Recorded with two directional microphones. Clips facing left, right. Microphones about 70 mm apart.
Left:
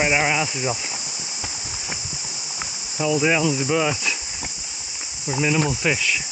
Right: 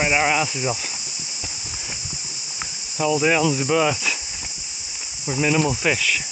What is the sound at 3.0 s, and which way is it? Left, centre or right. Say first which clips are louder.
Cricket: right 1 dB; centre.